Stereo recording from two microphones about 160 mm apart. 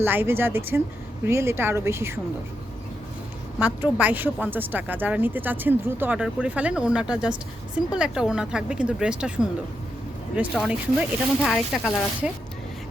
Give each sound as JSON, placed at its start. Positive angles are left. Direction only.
{"t": 0.0, "sound": "speech", "side_deg": -15}
{"t": 3.6, "sound": "speech", "side_deg": -10}